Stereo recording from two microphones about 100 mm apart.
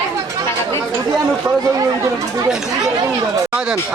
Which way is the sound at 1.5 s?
35° right (ahead or behind).